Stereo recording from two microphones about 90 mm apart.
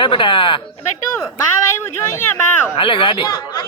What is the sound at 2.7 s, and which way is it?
Speech, 75° left (ahead or behind).